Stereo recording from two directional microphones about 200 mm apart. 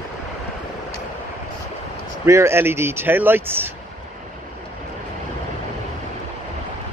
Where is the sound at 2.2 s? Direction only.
15° right (ahead or behind).